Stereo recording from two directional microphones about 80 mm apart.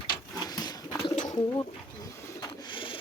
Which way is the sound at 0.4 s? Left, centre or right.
Left.